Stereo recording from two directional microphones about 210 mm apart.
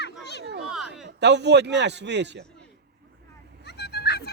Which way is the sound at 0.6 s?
5° right (ahead or behind).